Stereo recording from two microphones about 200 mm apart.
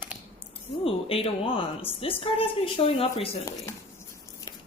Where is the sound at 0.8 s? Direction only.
25° left (ahead or behind).